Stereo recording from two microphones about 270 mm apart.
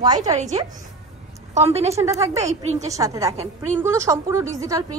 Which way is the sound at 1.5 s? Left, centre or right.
Right.